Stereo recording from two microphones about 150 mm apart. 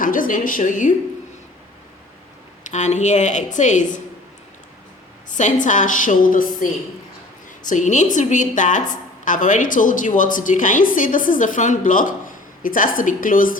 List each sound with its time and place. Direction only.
0.0 s a woman's voice: 65° left (ahead or behind)
2.6 s a woman's voice: 50° left (ahead or behind)
5.3 s a woman's voice: 55° left (ahead or behind)
7.7 s a woman's voice: 55° left (ahead or behind)